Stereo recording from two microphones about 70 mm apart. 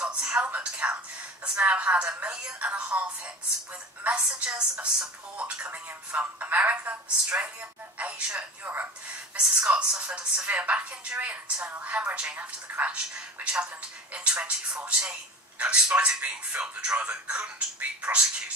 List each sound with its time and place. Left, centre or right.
0.0 s a woman's voice: centre